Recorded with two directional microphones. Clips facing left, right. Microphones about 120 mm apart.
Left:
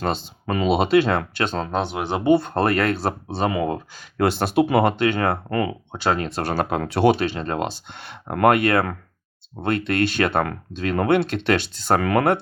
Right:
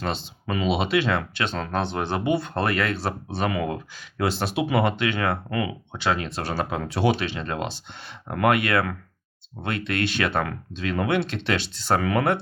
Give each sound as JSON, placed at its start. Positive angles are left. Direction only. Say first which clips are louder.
{"t": 0.0, "sound": "speech", "louder": "left 4 dB", "side_deg": 45}
{"t": 1.6, "sound": "speech", "louder": "left 2 dB", "side_deg": 15}
{"t": 2.2, "sound": "speech", "louder": "left 9 dB", "side_deg": 40}
{"t": 3.2, "sound": "speech", "louder": "left 3 dB", "side_deg": 30}
{"t": 4.2, "sound": "speech", "louder": "left 6 dB", "side_deg": 55}